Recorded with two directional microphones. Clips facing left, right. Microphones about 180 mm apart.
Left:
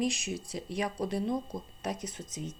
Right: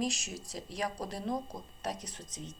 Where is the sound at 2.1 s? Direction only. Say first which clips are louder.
Left 6 dB; 10° left (ahead or behind).